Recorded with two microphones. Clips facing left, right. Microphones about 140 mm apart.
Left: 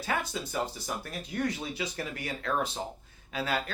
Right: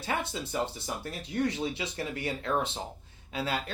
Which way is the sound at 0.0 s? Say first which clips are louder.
Even; 25° right (ahead or behind).